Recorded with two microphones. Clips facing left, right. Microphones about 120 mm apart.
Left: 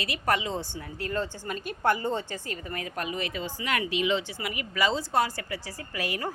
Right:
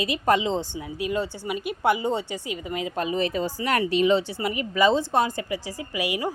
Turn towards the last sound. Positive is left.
turn(degrees=-15)  # may be behind; listen again after turning